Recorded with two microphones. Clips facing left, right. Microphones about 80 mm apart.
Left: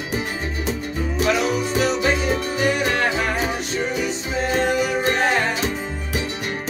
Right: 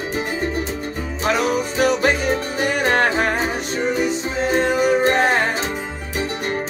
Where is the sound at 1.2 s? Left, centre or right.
Right.